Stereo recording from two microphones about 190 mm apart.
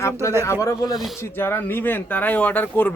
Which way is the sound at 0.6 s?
20° left (ahead or behind).